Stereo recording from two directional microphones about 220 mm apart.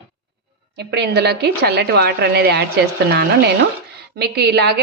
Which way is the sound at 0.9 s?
50° right (ahead or behind).